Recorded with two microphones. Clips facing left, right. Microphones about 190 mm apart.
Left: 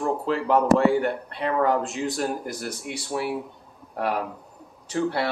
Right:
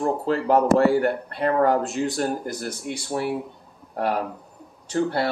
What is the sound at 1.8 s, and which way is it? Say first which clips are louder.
Speech: right 2 dB; centre (ahead or behind).